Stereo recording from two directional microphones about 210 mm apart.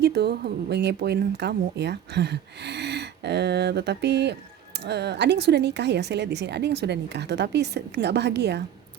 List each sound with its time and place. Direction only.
0.0 s speech: 50° right (ahead or behind)